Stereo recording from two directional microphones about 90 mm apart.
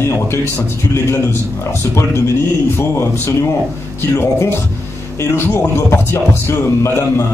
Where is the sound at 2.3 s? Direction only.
30° left (ahead or behind).